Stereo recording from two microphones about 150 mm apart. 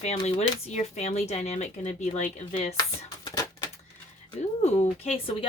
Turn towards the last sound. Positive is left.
turn(degrees=35)  # may be behind; listen again after turning